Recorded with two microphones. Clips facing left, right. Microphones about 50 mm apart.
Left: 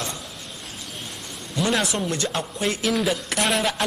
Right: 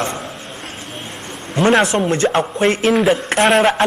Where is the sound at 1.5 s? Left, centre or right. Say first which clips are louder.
Right 10 dB; right.